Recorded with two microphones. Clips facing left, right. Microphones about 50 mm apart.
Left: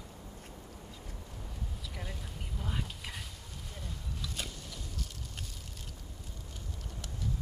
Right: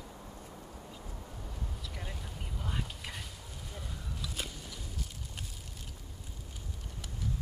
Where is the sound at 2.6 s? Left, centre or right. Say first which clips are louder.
Even; centre.